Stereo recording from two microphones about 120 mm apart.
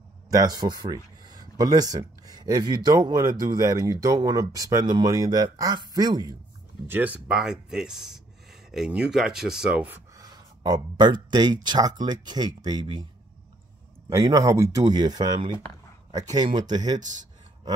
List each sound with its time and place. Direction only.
0.3 s a man's voice: 30° right (ahead or behind)
6.9 s speech: 15° right (ahead or behind)
7.2 s speech: 5° right (ahead or behind)
10.1 s speech: 30° right (ahead or behind)
14.0 s a man's voice: 30° right (ahead or behind)